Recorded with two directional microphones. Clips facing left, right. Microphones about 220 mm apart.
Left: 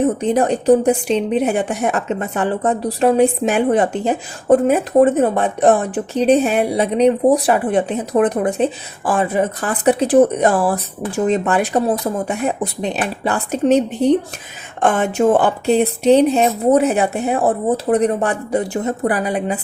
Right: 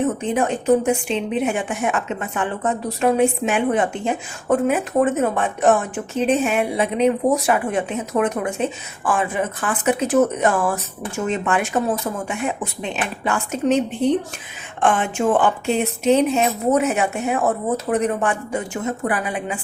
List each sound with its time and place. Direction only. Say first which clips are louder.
0.0 s a woman's voice: left 4 dB; 35° left (ahead or behind)